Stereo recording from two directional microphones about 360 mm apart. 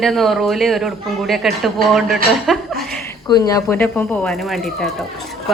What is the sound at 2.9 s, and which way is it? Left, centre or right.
A woman's voice, centre.